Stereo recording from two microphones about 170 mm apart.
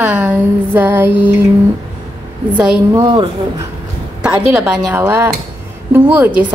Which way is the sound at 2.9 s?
25° right (ahead or behind).